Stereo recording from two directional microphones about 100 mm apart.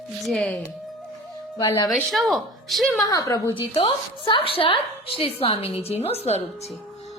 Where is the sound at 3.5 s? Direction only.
60° left (ahead or behind); by 6.4 s 90° left.